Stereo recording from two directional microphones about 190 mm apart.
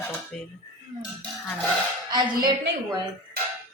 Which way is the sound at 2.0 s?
25° right (ahead or behind).